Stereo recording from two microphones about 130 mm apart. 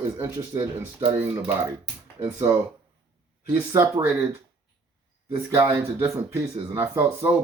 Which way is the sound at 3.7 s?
20° right (ahead or behind).